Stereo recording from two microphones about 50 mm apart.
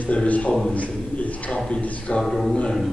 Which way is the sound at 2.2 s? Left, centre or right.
Centre.